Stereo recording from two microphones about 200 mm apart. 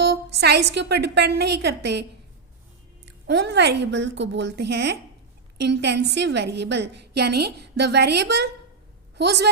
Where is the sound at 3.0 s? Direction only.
60° right (ahead or behind).